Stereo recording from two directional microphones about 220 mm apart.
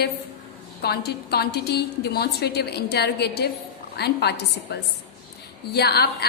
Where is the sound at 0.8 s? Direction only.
45° left (ahead or behind).